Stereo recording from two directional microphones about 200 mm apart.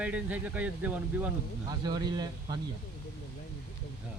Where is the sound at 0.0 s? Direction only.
5° right (ahead or behind).